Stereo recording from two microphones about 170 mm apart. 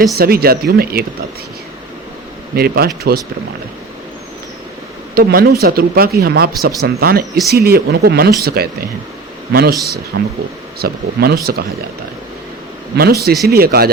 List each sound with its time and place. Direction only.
0.2 s speech: 65° right (ahead or behind)
2.6 s speech: 65° right (ahead or behind)
5.1 s speech: 60° right (ahead or behind)
10.1 s speech: 85° right
10.8 s speech: 65° right (ahead or behind)
13.0 s speech: 65° right (ahead or behind)